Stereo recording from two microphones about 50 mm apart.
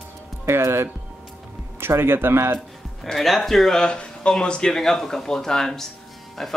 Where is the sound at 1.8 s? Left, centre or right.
Right.